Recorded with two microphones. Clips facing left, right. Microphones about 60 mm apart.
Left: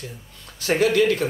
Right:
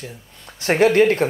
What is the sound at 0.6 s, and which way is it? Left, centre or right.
Speech, right.